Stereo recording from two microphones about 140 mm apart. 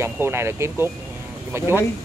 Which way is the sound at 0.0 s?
15° right (ahead or behind).